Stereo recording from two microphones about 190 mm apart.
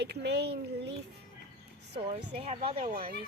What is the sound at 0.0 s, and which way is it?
Speech, 60° right (ahead or behind).